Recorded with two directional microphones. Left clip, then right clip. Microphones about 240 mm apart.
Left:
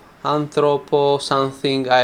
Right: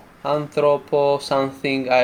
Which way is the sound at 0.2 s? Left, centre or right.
Left.